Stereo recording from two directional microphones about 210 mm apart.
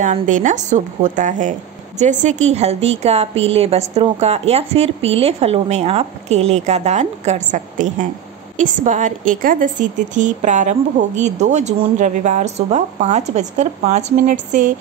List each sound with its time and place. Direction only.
0.0 s a woman's voice: 35° right (ahead or behind)